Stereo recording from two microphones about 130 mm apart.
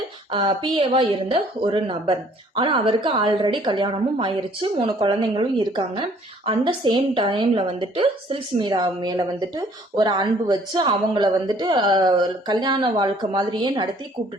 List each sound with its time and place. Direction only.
0.3 s a woman's voice: 40° right (ahead or behind)